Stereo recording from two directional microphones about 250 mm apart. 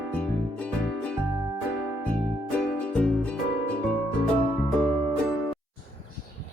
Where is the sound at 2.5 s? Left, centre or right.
Centre.